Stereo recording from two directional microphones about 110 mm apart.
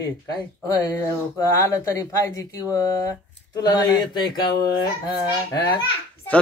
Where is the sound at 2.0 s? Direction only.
30° left (ahead or behind).